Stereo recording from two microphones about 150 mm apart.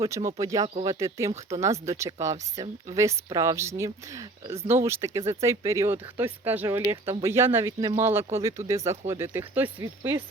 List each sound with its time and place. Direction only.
0.0 s speech: 20° right (ahead or behind)